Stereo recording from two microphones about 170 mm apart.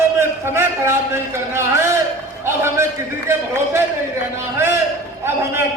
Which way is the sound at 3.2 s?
15° right (ahead or behind).